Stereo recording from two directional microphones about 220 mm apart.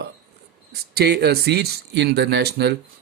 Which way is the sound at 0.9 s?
45° right (ahead or behind).